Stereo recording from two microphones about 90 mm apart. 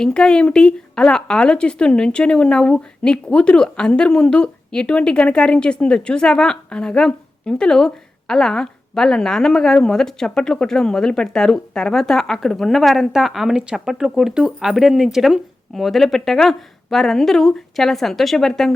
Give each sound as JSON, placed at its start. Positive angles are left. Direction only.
{"t": 0.0, "sound": "speech", "side_deg": 10}